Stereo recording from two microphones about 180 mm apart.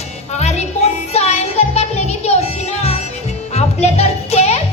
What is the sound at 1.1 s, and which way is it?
Music, 35° left (ahead or behind).